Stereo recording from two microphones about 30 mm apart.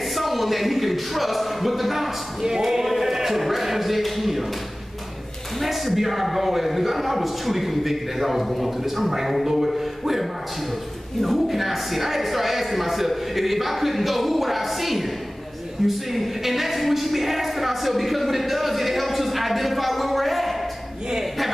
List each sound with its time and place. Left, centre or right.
0.0 s a man's voice: centre
2.4 s speech: centre
2.9 s a sound: centre
5.6 s a man's voice: centre
11.2 s a man's voice: centre
15.9 s a sound: centre